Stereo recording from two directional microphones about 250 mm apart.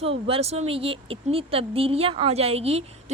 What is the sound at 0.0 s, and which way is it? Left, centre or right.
Speech, right.